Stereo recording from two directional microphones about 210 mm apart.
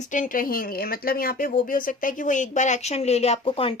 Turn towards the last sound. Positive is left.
turn(degrees=25)  # may be behind; listen again after turning